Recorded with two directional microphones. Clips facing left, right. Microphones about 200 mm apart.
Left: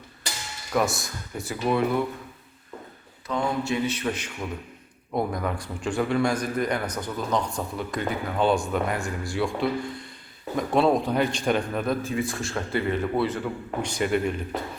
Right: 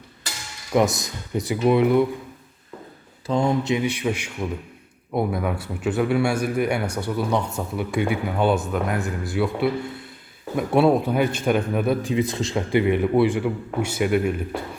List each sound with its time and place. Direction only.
0.7 s a man's voice: 20° right (ahead or behind)
3.2 s a man's voice: 30° right (ahead or behind); by 14.6 s 10° right (ahead or behind)